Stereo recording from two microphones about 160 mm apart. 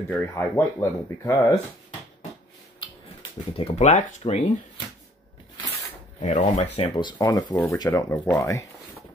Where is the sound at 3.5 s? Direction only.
40° left (ahead or behind).